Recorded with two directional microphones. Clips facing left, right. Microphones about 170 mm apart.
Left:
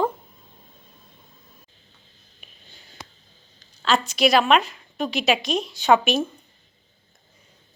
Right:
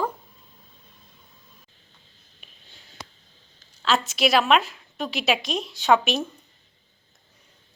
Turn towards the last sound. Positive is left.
turn(degrees=0)  # may be behind; listen again after turning